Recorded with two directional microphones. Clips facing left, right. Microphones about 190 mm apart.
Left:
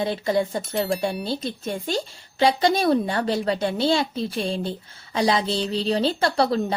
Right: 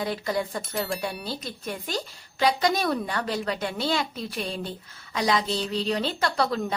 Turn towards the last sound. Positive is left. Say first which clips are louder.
# left 4 dB
turn(degrees=30)  # may be behind; listen again after turning